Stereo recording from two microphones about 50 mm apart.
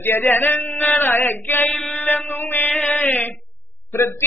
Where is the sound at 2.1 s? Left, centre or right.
Left.